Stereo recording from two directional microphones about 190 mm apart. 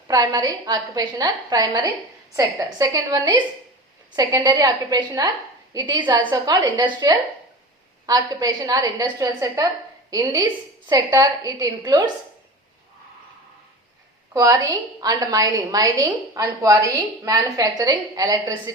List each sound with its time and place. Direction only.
0.1 s a woman's voice: 20° right (ahead or behind)
14.3 s a woman's voice: 15° right (ahead or behind)